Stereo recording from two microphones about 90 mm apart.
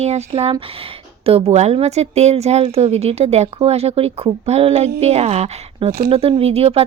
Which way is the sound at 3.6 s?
90° right.